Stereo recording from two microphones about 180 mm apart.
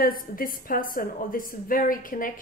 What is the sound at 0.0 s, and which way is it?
A woman's voice, 50° left (ahead or behind).